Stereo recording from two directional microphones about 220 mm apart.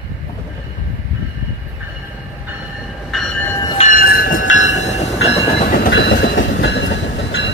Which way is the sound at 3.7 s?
35° left (ahead or behind).